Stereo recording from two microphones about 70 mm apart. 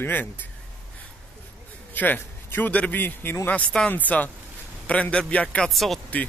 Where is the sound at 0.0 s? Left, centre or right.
Left.